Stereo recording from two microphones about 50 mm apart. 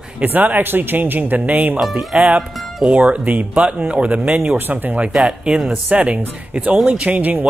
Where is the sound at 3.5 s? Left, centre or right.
Right.